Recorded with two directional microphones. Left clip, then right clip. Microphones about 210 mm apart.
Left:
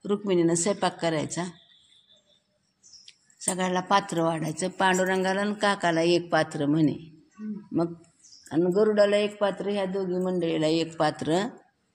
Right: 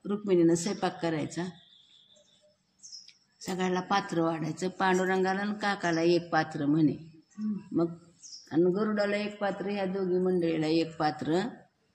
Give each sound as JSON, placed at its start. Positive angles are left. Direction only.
{"t": 0.0, "sound": "speech", "side_deg": 45}
{"t": 3.1, "sound": "speech", "side_deg": 45}